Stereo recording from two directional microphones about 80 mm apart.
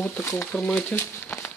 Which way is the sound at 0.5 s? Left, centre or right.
Centre.